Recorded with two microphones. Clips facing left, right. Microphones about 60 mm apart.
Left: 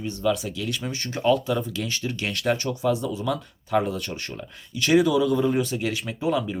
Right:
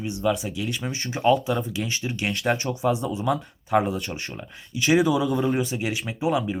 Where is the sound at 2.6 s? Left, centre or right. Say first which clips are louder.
Even; right.